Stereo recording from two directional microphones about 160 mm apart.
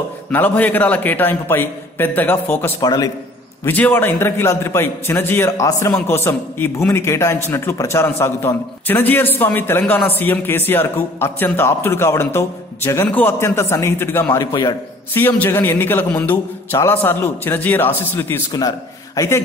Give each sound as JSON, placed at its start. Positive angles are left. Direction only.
{"t": 0.3, "sound": "a man's voice", "side_deg": 10}
{"t": 2.8, "sound": "a man's voice", "side_deg": 25}
{"t": 3.6, "sound": "a man's voice", "side_deg": 10}
{"t": 15.1, "sound": "a man's voice", "side_deg": 15}